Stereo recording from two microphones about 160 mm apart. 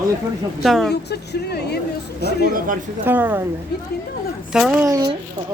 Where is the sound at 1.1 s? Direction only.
90° left.